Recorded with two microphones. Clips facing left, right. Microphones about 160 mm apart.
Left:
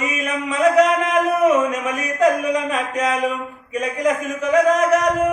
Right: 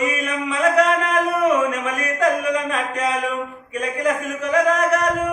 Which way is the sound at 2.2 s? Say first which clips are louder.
Left 3 dB; centre (ahead or behind).